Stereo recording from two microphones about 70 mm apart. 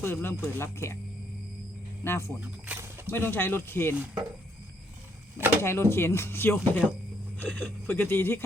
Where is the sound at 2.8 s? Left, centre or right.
Right.